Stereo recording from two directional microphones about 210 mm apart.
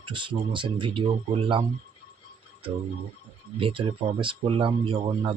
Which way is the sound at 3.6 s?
25° right (ahead or behind).